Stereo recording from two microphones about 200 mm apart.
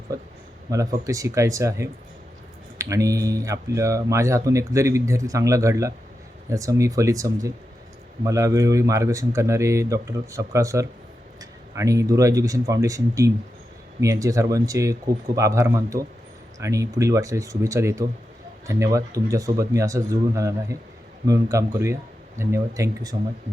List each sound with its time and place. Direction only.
0.7 s speech: 15° right (ahead or behind)